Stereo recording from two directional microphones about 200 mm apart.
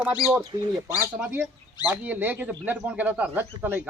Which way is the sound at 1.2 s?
10° right (ahead or behind).